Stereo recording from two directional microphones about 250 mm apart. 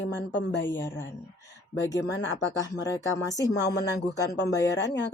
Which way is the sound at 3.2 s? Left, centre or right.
Centre.